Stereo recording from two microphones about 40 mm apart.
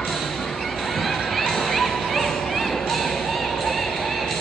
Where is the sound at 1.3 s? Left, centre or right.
Centre.